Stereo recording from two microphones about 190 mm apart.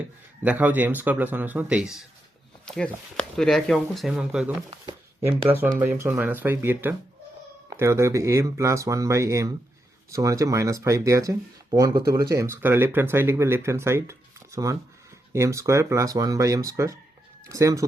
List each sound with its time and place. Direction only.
0.4 s speech: 10° right (ahead or behind)
5.8 s speech: 10° right (ahead or behind)